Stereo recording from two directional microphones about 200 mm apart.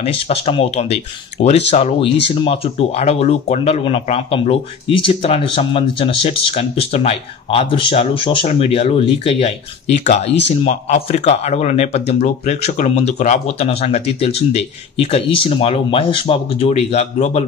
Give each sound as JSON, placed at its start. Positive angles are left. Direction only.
{"t": 0.0, "sound": "speech", "side_deg": 30}